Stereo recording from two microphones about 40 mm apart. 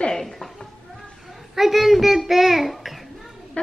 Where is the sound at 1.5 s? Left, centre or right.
Centre.